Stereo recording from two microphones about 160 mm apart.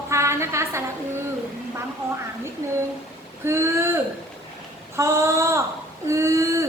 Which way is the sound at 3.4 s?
15° right (ahead or behind).